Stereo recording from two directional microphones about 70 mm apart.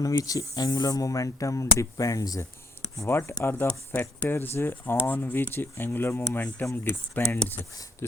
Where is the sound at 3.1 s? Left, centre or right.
Left.